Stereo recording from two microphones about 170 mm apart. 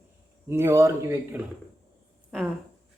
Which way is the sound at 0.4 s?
15° right (ahead or behind).